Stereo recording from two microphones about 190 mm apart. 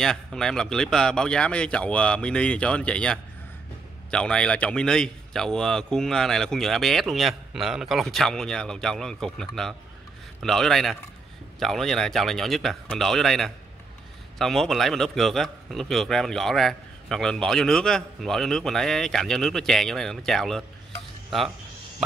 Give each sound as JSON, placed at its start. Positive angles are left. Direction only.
{"t": 0.0, "sound": "a man's voice", "side_deg": 0}